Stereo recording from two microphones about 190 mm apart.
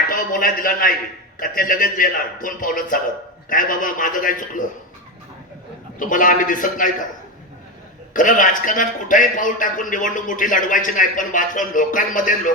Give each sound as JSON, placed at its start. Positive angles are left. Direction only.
{"t": 0.1, "sound": "a man's voice", "side_deg": 50}
{"t": 6.0, "sound": "a man's voice", "side_deg": 45}
{"t": 8.1, "sound": "a man's voice", "side_deg": 45}